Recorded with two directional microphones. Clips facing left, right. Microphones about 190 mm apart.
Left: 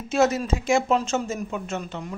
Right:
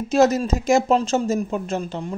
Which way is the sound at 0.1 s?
35° right (ahead or behind).